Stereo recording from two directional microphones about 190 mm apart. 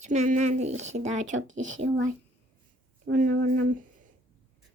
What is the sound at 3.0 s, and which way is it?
Speech, 45° right (ahead or behind).